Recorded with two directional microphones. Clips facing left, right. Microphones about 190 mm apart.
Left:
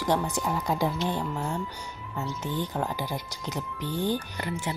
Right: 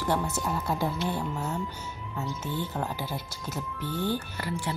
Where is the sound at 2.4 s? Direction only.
15° left (ahead or behind).